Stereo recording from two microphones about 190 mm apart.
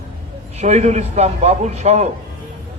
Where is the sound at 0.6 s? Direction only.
35° right (ahead or behind).